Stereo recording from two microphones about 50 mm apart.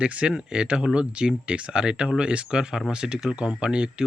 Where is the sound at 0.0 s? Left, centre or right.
Right.